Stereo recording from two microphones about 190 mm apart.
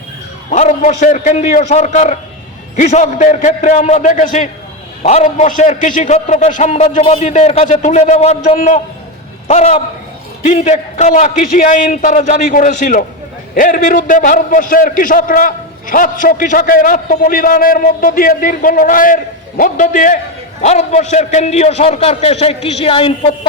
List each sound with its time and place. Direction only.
0.5 s a man's voice: 40° left (ahead or behind)